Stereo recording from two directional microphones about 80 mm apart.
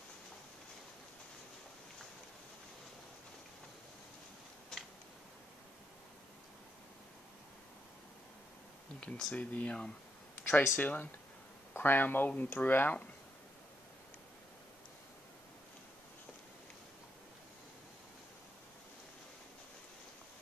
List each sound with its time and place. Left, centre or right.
4.7 s scissors: centre
9.0 s speech: centre